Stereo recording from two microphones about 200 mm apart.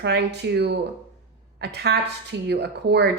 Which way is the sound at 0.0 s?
55° right (ahead or behind).